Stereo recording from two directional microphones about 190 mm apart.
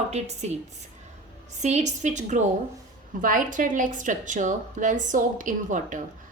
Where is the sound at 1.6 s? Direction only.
35° right (ahead or behind).